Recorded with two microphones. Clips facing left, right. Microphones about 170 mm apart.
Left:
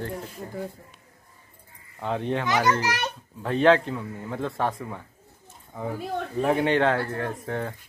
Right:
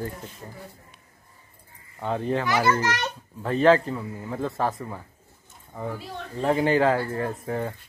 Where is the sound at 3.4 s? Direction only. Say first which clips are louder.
Right 1 dB; centre (ahead or behind).